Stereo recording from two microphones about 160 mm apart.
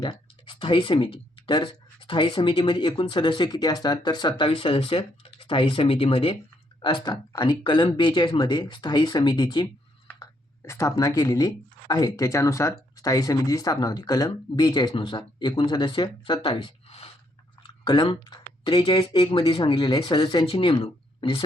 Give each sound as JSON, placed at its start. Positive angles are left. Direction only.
{"t": 0.0, "sound": "speech", "side_deg": 30}
{"t": 10.7, "sound": "speech", "side_deg": 20}